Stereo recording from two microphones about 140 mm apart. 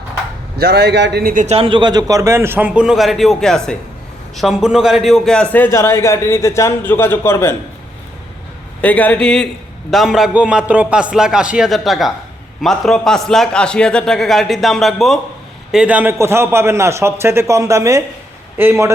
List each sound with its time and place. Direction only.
0.6 s a man's voice: 90° right
1.2 s a man's voice: 75° right (ahead or behind)
1.5 s a man's voice: 40° right (ahead or behind); by 7.5 s 20° left (ahead or behind)
8.8 s a man's voice: 10° left (ahead or behind); by 18.9 s 20° right (ahead or behind)